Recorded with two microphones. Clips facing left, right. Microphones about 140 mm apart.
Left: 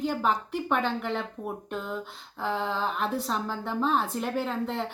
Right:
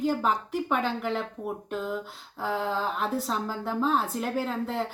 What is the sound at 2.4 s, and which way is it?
Speech, 5° right (ahead or behind).